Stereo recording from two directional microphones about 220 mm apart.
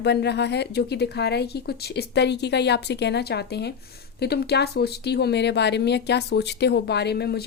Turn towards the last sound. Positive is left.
turn(degrees=45)  # may be behind; listen again after turning